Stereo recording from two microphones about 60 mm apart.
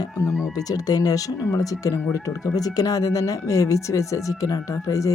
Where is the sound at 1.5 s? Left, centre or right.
Left.